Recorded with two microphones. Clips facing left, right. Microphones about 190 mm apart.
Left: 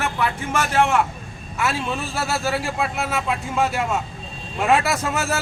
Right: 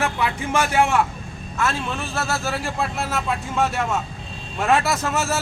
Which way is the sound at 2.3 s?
Centre (ahead or behind).